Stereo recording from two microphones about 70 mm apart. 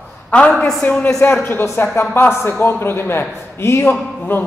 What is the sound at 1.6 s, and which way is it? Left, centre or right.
A man's voice, left.